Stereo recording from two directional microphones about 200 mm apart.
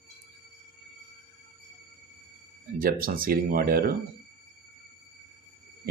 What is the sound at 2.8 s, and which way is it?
Speech, 45° right (ahead or behind).